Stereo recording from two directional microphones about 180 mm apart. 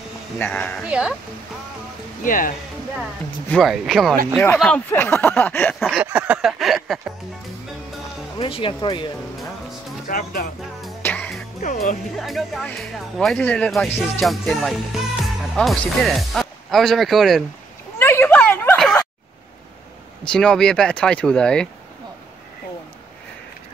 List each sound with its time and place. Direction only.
0.4 s speech: 10° left (ahead or behind)
0.8 s speech: 5° right (ahead or behind)
2.2 s speech: 50° left (ahead or behind)
3.4 s speech: centre (ahead or behind)
8.4 s speech: 30° left (ahead or behind)
10.0 s speech: 55° left (ahead or behind)
11.0 s music: 10° left (ahead or behind)
11.6 s speech: 45° left (ahead or behind)
12.2 s speech: centre (ahead or behind)
17.9 s a sound: 15° left (ahead or behind)
20.2 s speech: 5° left (ahead or behind)